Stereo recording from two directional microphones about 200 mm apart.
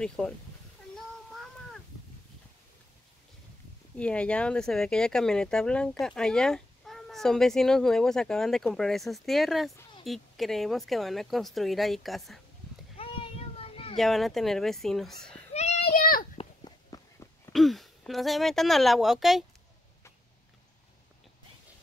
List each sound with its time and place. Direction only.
0.0 s speech: 5° left (ahead or behind)
0.9 s child singing: centre (ahead or behind)
3.9 s speech: 5° left (ahead or behind)
12.9 s child singing: 30° left (ahead or behind)
13.9 s speech: centre (ahead or behind)
15.5 s a sound: 35° left (ahead or behind)
16.3 s walk: 20° left (ahead or behind)
17.5 s speech: centre (ahead or behind)